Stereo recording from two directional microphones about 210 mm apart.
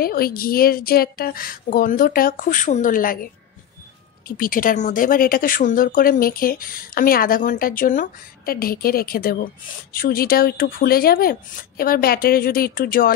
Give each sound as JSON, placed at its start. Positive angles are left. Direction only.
{"t": 0.0, "sound": "speech", "side_deg": 45}
{"t": 4.4, "sound": "speech", "side_deg": 40}